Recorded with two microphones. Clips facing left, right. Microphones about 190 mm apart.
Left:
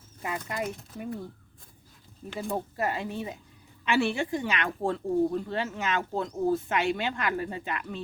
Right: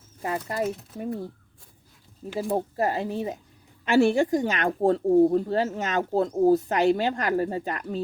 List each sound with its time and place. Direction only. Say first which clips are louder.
0.2 s speech: right 5 dB; 35° right (ahead or behind)
2.4 s speech: right 5 dB; 35° right (ahead or behind)